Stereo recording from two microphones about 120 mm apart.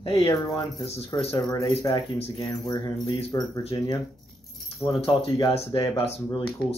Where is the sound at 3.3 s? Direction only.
25° left (ahead or behind).